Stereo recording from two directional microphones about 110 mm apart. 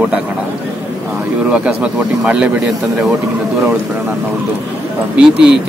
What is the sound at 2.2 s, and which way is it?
Speech, 10° right (ahead or behind).